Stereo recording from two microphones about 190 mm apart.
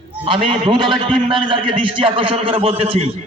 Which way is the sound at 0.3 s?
25° right (ahead or behind).